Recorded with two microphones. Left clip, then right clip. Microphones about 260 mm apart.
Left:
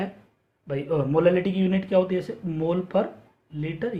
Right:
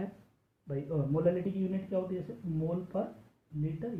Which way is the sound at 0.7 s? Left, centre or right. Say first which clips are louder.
Left 11 dB; left.